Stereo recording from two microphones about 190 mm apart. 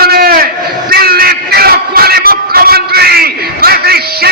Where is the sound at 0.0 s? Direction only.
50° right (ahead or behind).